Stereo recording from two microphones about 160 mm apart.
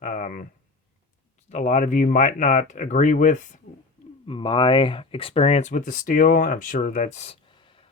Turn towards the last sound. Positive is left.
turn(degrees=45)  # may be behind; listen again after turning